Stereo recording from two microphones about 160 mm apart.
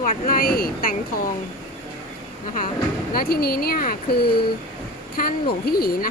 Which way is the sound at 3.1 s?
70° left (ahead or behind).